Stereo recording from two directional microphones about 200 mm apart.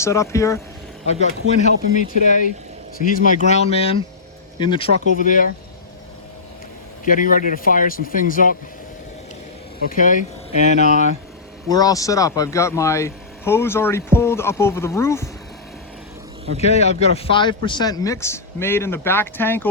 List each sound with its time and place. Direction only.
0.0 s speech: 15° left (ahead or behind)
1.0 s speech: 35° left (ahead or behind)
5.2 s speech: 40° left (ahead or behind)
7.1 s speech: 40° left (ahead or behind)
9.9 s speech: 40° left (ahead or behind)
11.7 s speech: 20° left (ahead or behind)
16.6 s speech: 30° left (ahead or behind); by 19.6 s 10° left (ahead or behind)